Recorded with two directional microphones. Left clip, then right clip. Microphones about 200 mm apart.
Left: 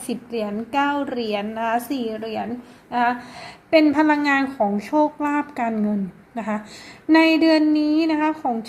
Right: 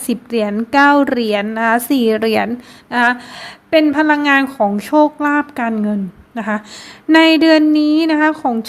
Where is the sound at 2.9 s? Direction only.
20° right (ahead or behind).